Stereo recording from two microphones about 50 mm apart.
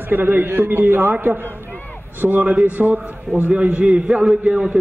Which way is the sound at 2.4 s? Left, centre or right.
Right.